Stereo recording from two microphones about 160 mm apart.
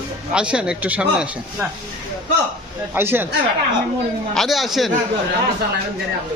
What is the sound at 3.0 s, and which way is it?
Speech, 15° right (ahead or behind).